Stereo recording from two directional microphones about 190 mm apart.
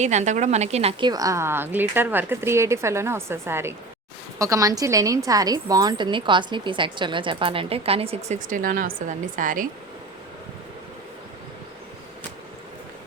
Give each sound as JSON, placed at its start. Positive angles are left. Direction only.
{"t": 0.0, "sound": "a woman's voice", "side_deg": -40}